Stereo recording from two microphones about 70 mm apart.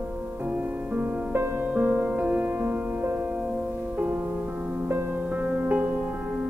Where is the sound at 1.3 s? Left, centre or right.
Right.